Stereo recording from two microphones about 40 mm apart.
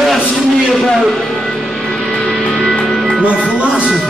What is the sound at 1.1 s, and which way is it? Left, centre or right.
Music, centre.